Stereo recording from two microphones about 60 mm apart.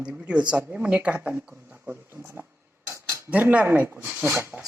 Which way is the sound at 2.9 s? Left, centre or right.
Right.